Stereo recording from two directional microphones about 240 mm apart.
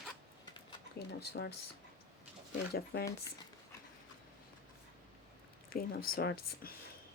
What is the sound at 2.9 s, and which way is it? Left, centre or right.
Speech, left.